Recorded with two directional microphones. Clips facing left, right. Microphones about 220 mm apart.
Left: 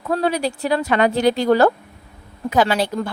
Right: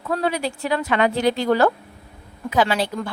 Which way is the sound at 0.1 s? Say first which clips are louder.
Left 3 dB; 35° left (ahead or behind).